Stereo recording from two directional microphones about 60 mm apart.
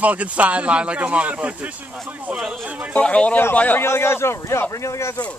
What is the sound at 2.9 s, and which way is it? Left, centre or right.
Speech, centre.